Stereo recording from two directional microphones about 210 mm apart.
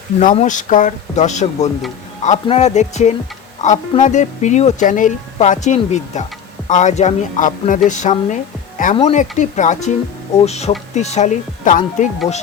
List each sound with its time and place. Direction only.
0.2 s speech: 35° left (ahead or behind)